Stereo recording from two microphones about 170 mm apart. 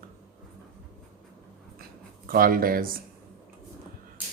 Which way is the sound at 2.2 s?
55° right (ahead or behind).